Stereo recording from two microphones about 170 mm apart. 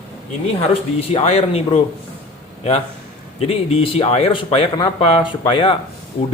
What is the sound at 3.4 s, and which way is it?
Speech, 35° left (ahead or behind).